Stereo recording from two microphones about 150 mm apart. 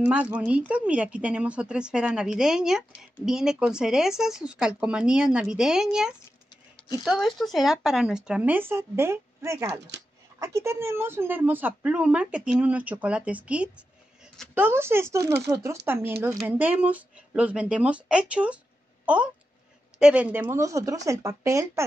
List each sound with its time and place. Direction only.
0.0 s a woman's voice: 10° right (ahead or behind)
20.0 s speech: 5° right (ahead or behind)